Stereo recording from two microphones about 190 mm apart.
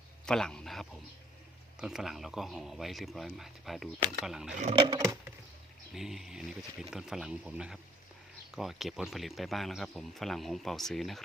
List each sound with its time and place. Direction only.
0.3 s speech: 5° left (ahead or behind)
4.7 s a sound: 25° right (ahead or behind)
5.9 s speech: centre (ahead or behind)